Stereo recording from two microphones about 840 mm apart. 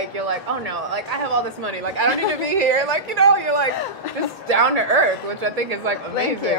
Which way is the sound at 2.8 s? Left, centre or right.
Right.